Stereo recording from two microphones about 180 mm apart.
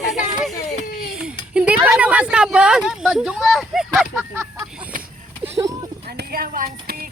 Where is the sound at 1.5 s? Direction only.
5° right (ahead or behind).